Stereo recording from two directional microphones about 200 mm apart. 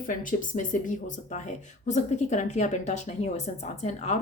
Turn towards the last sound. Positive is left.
turn(degrees=35)  # may be behind; listen again after turning